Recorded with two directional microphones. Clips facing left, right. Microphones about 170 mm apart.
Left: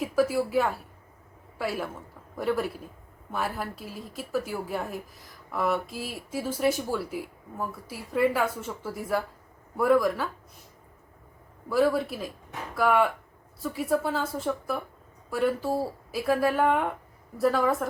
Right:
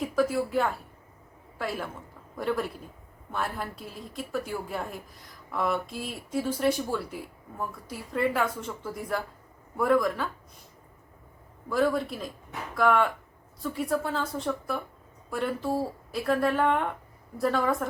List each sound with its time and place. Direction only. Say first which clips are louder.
0.0 s a woman's voice: left 1 dB; 5° left (ahead or behind)
11.7 s a woman's voice: left 2 dB; 5° left (ahead or behind)